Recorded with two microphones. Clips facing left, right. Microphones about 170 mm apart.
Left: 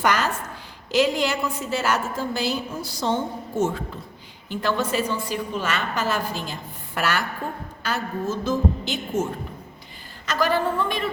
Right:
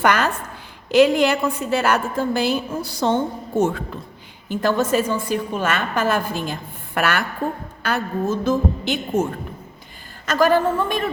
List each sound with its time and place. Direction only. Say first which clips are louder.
0.0 s a sound: right 4 dB; 60° right (ahead or behind)
0.9 s a woman's voice: right 6 dB; 55° right (ahead or behind)
4.4 s a woman's voice: right 5 dB; 45° right (ahead or behind)
10.2 s a woman's voice: right 5 dB; 45° right (ahead or behind)